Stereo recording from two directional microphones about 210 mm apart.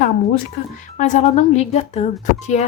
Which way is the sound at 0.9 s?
35° left (ahead or behind).